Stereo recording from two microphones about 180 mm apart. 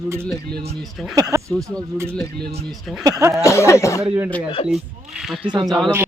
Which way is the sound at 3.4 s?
15° left (ahead or behind).